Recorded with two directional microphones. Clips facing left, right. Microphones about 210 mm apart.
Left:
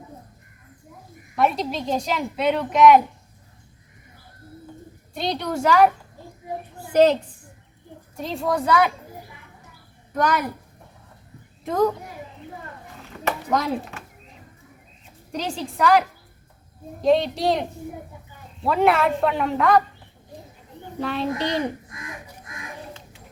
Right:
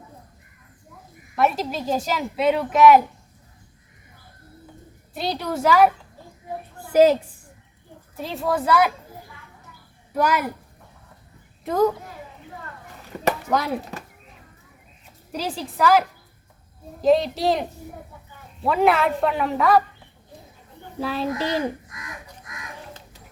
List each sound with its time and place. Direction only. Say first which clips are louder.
1.4 s a woman's voice: even; centre (ahead or behind)
5.1 s a woman's voice: left 1 dB; 5° right (ahead or behind)
6.9 s a woman's voice: right 1 dB; 5° right (ahead or behind)
10.2 s a woman's voice: even; 5° right (ahead or behind)
11.6 s a child's voice: right 1 dB; centre (ahead or behind)
13.1 s a sound: right 4 dB; 35° right (ahead or behind)
13.5 s a woman's voice: left 3 dB; centre (ahead or behind)
15.3 s a woman's voice: even; 5° right (ahead or behind)
21.0 s a woman's voice: even; 5° right (ahead or behind)
21.8 s chicken: left 2 dB; 25° left (ahead or behind)